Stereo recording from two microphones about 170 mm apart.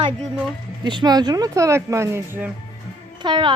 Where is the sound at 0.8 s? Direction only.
25° right (ahead or behind).